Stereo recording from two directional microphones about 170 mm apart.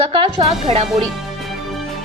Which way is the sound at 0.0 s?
30° right (ahead or behind).